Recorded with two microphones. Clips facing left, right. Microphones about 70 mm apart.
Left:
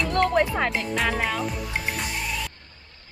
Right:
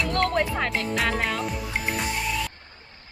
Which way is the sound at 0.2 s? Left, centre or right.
Centre.